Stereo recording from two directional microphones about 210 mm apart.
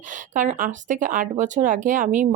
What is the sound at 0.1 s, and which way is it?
Speech, 40° right (ahead or behind).